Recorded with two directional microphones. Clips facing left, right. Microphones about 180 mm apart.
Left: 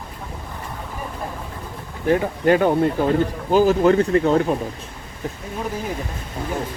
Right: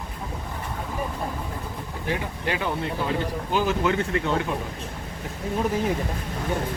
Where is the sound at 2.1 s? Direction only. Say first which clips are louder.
Left 12 dB; 45° left (ahead or behind).